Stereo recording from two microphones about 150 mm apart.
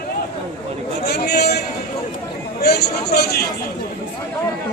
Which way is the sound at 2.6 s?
90° left.